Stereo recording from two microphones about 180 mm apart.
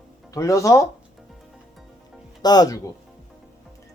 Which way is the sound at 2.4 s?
20° left (ahead or behind).